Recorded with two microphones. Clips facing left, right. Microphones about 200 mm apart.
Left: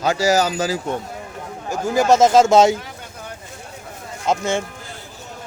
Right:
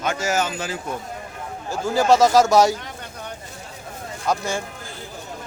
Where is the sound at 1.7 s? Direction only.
20° left (ahead or behind).